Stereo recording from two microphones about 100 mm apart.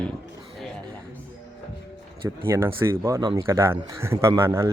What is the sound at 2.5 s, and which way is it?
A man's voice, 25° right (ahead or behind).